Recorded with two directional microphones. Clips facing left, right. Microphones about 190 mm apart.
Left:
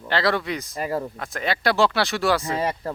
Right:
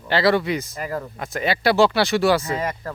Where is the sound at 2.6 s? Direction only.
30° left (ahead or behind).